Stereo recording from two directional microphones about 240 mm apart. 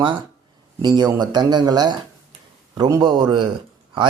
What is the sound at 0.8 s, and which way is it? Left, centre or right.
A man's voice, centre.